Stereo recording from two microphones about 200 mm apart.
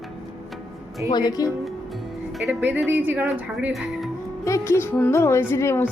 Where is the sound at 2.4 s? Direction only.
5° right (ahead or behind).